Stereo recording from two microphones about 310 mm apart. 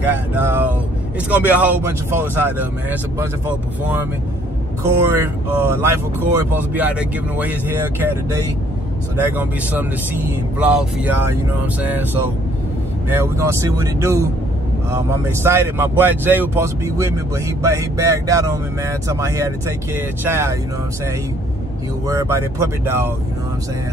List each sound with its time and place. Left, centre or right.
0.0 s speech: centre
4.8 s speech: centre
22.0 s speech: centre